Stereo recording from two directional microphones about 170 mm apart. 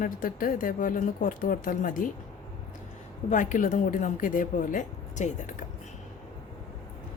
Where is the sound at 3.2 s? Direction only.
50° left (ahead or behind).